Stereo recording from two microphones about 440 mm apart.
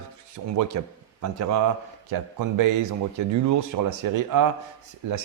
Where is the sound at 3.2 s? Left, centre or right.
Right.